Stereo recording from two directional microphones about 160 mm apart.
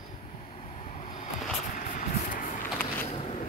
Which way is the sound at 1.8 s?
55° left (ahead or behind).